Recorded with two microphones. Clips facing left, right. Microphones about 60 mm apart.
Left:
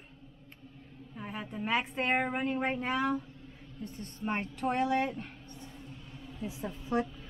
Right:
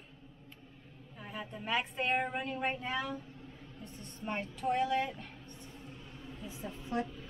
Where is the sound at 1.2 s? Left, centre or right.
Centre.